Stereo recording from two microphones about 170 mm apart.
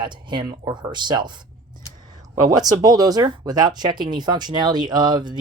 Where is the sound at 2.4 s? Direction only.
20° right (ahead or behind).